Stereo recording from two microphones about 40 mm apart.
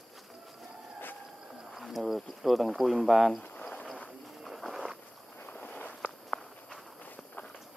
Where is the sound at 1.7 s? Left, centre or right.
Centre.